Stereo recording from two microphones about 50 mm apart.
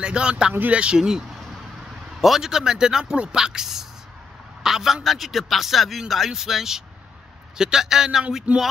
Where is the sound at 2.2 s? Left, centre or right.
Centre.